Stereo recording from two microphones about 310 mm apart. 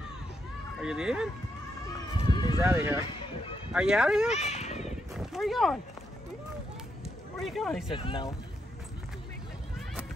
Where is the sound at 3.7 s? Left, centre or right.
Centre.